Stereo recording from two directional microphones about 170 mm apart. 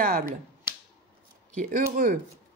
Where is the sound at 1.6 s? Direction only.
50° right (ahead or behind).